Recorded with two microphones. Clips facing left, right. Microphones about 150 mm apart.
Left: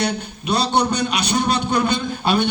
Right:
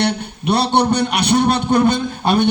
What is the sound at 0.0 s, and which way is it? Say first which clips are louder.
A man's voice: right 4 dB; 60° right (ahead or behind).